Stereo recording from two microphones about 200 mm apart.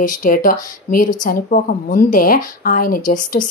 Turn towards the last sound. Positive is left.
turn(degrees=40)  # may be behind; listen again after turning